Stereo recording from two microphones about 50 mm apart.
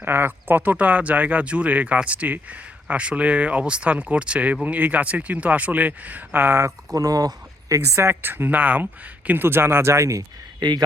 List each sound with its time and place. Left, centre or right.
0.0 s speech: right
7.7 s speech: right
8.2 s speech: right